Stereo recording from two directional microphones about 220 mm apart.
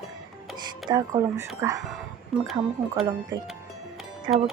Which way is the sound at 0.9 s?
10° right (ahead or behind).